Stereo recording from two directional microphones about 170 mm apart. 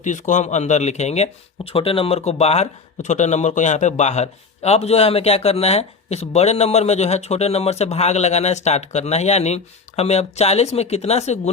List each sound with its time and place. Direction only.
0.0 s speech: 45° left (ahead or behind)